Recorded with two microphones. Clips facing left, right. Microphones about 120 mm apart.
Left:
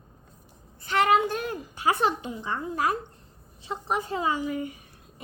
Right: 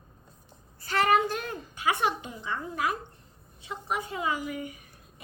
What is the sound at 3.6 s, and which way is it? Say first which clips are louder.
A woman's voice: left 4 dB; 30° left (ahead or behind).